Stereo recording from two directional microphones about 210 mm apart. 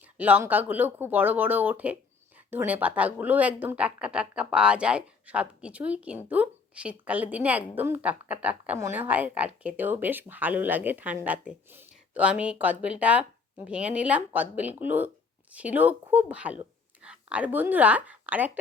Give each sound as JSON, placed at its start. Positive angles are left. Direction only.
{"t": 0.2, "sound": "speech", "side_deg": -10}